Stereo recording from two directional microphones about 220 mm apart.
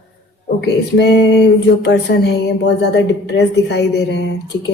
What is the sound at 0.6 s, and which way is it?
Speech, 50° left (ahead or behind).